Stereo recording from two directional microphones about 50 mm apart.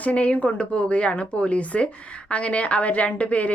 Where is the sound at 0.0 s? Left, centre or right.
Left.